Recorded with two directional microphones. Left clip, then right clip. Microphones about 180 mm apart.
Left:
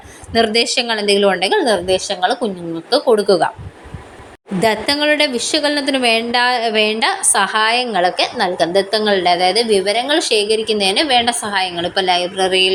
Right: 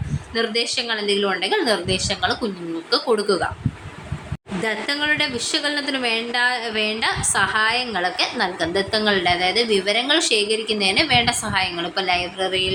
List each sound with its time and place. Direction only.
0.3 s a woman's voice: 40° left (ahead or behind); by 3.5 s 25° left (ahead or behind)
4.6 s a woman's voice: 35° left (ahead or behind)